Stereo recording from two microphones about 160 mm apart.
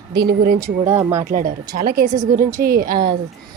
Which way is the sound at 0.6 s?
15° right (ahead or behind).